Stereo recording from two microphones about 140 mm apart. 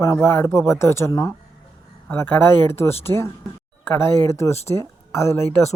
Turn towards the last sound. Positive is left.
turn(degrees=20)  # may be behind; listen again after turning